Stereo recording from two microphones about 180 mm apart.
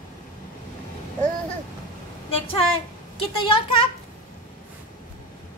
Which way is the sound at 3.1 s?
30° left (ahead or behind).